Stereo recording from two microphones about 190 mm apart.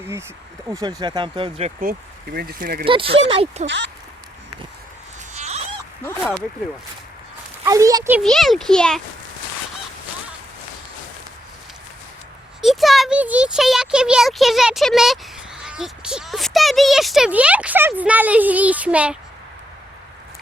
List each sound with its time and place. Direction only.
0.0 s speech: 15° right (ahead or behind); by 1.7 s 30° right (ahead or behind)
1.8 s speech: 50° right (ahead or behind)
2.8 s speech: 30° right (ahead or behind)
3.7 s speech: 70° right (ahead or behind)
5.3 s a sound: 35° right (ahead or behind)
6.1 s speech: 10° left (ahead or behind)
7.6 s a child's voice: 15° right (ahead or behind)
8.2 s a child's voice: centre (ahead or behind)
12.6 s speech: centre (ahead or behind)